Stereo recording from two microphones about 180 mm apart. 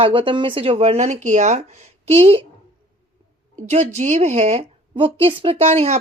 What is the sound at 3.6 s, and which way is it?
A woman's voice, 40° right (ahead or behind).